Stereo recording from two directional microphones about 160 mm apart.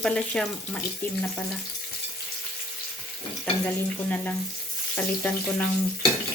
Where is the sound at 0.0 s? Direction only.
5° left (ahead or behind).